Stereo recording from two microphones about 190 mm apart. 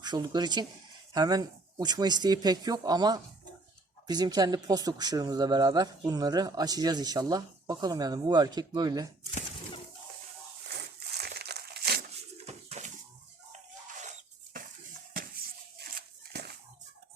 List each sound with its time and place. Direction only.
0.0 s speech: 20° right (ahead or behind)
11.2 s crumpling: 60° right (ahead or behind)
12.5 s bird: 35° right (ahead or behind)
13.5 s music: 40° right (ahead or behind)
15.1 s a sound: 50° right (ahead or behind)